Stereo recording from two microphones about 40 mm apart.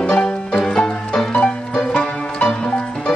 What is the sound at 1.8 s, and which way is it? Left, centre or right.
Music, left.